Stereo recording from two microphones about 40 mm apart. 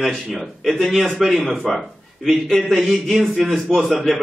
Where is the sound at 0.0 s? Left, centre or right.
Centre.